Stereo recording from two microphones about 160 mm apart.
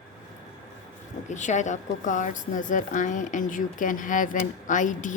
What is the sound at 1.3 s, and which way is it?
Speech, 50° left (ahead or behind).